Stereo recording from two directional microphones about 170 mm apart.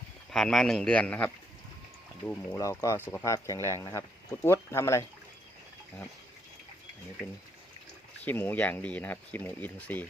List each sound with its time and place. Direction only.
0.3 s speech: centre (ahead or behind)
2.6 s speech: 20° left (ahead or behind)
8.2 s speech: 10° left (ahead or behind)